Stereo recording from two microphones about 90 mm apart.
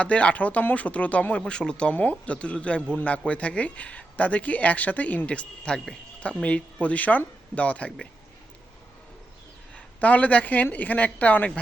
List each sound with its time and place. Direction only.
0.0 s speech: 15° left (ahead or behind)
9.7 s speech: 15° left (ahead or behind)